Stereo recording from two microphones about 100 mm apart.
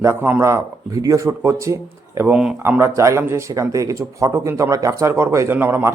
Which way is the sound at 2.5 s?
20° right (ahead or behind).